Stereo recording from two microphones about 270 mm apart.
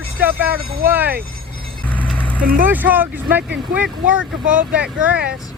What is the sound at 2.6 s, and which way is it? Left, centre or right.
Speech, centre.